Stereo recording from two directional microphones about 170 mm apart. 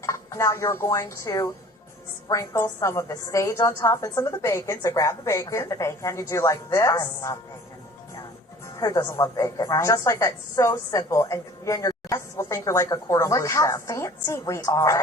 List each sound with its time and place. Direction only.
0.0 s a woman's voice: 15° left (ahead or behind)
8.8 s a woman's voice: 20° left (ahead or behind)